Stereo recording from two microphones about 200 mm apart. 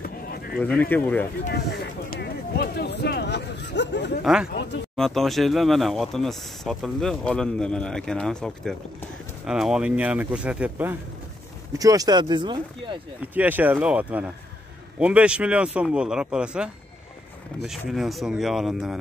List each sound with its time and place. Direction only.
0.0 s a sound: 50° left (ahead or behind)
0.6 s speech: 10° left (ahead or behind)
1.5 s speech: 55° left (ahead or behind)
4.2 s speech: 5° right (ahead or behind); by 13.0 s 25° right (ahead or behind)
13.2 s speech: 10° right (ahead or behind)